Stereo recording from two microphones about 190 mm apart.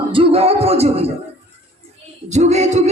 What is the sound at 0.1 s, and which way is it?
Music, 30° right (ahead or behind).